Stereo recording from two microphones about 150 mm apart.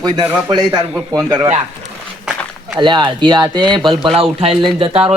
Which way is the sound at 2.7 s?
30° right (ahead or behind).